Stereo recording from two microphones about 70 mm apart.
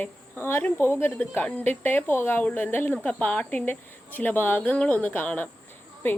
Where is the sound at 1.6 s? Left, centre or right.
Left.